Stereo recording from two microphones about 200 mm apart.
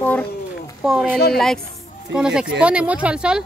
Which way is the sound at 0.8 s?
Centre (ahead or behind).